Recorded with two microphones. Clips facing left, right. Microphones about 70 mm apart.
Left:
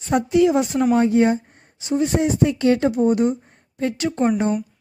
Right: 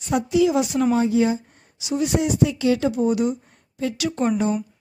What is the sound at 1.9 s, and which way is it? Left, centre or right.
A woman's voice, left.